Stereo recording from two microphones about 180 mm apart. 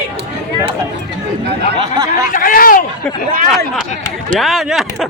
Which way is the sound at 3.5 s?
Centre (ahead or behind).